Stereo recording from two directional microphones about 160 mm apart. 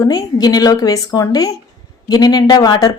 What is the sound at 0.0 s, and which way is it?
Speech, 25° left (ahead or behind).